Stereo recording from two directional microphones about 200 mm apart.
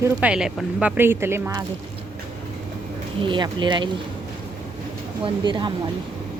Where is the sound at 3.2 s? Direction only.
25° right (ahead or behind).